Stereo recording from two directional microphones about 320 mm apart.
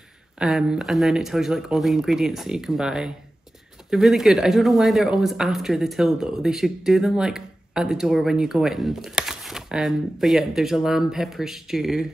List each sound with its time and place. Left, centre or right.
0.4 s speech: centre